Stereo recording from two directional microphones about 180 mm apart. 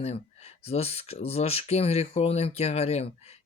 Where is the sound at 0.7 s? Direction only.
35° left (ahead or behind).